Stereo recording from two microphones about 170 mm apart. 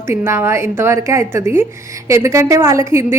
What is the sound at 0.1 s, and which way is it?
A woman's voice, 15° right (ahead or behind).